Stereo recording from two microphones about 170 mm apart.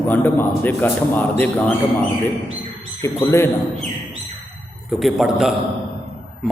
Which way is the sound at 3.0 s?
15° left (ahead or behind).